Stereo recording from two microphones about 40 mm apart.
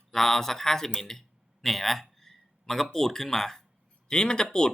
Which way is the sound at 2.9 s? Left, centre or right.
Centre.